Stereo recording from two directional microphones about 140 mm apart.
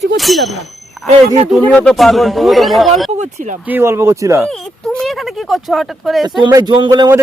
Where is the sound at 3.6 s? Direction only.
15° right (ahead or behind).